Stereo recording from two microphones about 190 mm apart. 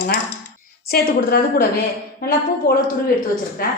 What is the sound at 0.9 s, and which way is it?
A woman's voice, 50° left (ahead or behind).